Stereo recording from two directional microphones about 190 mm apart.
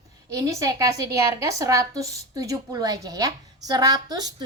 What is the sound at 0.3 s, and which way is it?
A woman's voice, 15° right (ahead or behind).